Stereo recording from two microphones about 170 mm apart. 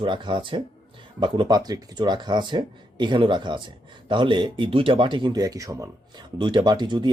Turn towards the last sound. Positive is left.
turn(degrees=-25)  # may be behind; listen again after turning